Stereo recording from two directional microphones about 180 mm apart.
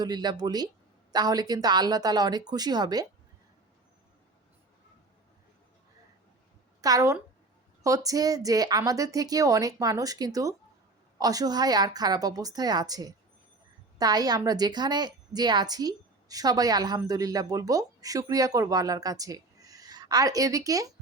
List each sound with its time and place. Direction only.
0.0 s a woman's voice: 20° right (ahead or behind)
6.8 s a woman's voice: 20° right (ahead or behind)